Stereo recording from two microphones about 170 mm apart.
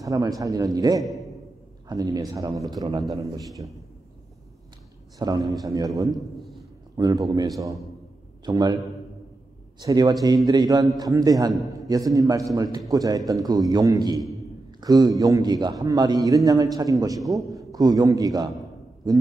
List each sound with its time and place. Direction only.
0.0 s a man's voice: 20° right (ahead or behind)
5.2 s a man's voice: 25° right (ahead or behind)
9.8 s a man's voice: 25° right (ahead or behind)